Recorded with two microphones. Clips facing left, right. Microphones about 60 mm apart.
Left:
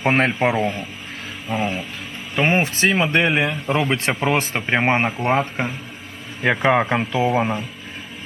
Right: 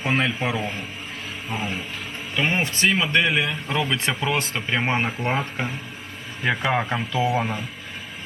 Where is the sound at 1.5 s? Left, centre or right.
Left.